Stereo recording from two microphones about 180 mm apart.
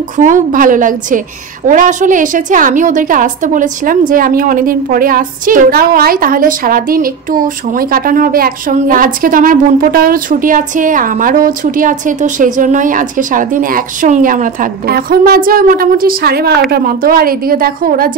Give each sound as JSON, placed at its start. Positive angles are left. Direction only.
{"t": 0.2, "sound": "a woman's voice", "side_deg": -45}